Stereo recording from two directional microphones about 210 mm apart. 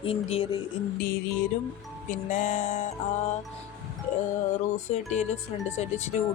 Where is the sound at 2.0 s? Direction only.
35° left (ahead or behind).